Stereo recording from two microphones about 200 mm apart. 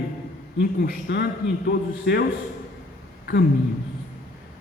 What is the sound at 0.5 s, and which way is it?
Speech, 55° left (ahead or behind).